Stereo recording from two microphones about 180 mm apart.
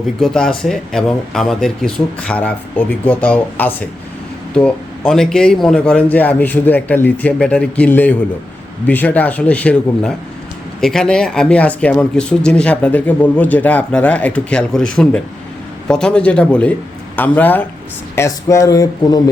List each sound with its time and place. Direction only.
0.2 s speech: 5° left (ahead or behind); by 19.2 s 20° left (ahead or behind)